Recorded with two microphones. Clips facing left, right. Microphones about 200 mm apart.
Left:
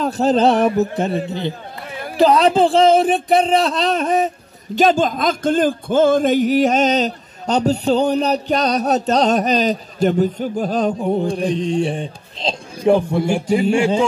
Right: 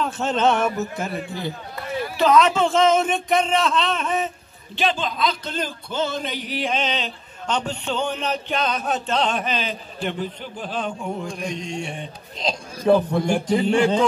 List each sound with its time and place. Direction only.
0.0 s speech: 35° left (ahead or behind)
12.8 s a man's voice: 10° left (ahead or behind)